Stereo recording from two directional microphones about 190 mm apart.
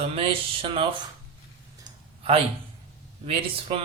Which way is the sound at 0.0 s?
30° right (ahead or behind).